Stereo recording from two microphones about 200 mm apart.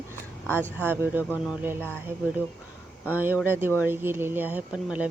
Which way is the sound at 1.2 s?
10° left (ahead or behind).